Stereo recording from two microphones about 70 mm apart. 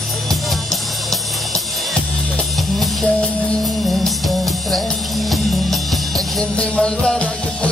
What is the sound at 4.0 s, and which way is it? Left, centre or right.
Music, centre.